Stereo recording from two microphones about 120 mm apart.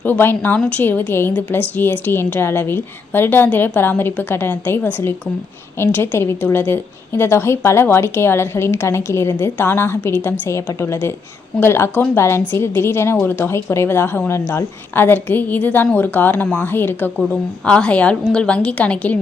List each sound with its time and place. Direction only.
0.0 s a woman's voice: 15° left (ahead or behind)